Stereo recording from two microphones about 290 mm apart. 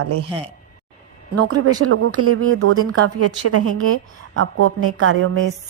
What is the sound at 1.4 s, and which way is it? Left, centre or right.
Speech, right.